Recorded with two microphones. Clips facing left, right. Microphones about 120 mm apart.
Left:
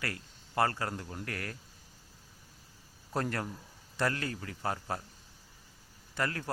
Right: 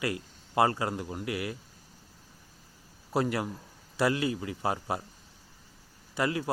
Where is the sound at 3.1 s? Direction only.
10° right (ahead or behind).